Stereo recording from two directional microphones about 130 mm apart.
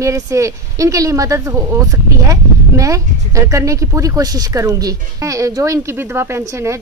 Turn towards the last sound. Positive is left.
turn(degrees=-20)  # may be behind; listen again after turning